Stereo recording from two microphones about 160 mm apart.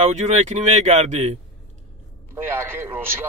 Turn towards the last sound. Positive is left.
turn(degrees=-15)  # may be behind; listen again after turning